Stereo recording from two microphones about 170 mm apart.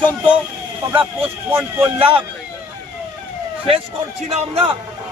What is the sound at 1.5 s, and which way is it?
Speech, 15° right (ahead or behind).